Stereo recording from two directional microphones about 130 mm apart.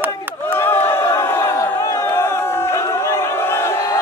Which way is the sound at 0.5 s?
20° left (ahead or behind).